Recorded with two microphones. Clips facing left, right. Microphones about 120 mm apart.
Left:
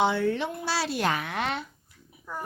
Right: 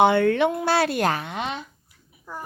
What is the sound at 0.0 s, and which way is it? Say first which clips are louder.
A woman's voice: right 7 dB; 60° right (ahead or behind).